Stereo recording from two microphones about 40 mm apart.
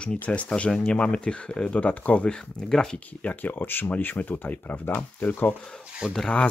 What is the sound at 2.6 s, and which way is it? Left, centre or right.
Speech, centre.